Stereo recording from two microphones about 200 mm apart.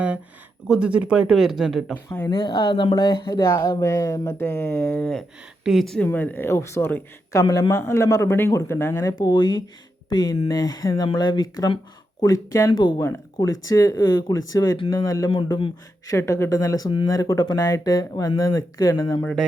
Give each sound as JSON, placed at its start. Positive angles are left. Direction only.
{"t": 0.7, "sound": "speech", "side_deg": -5}
{"t": 2.0, "sound": "speech", "side_deg": 15}